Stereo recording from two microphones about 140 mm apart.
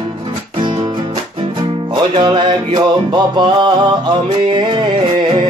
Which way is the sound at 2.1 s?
35° right (ahead or behind).